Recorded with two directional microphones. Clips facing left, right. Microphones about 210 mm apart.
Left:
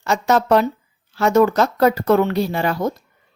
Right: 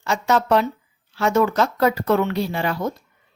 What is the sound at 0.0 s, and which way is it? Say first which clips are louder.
Speech: left 3 dB; 40° left (ahead or behind).